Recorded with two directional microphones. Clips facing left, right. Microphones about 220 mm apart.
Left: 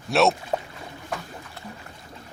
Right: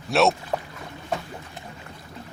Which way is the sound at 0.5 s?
20° left (ahead or behind).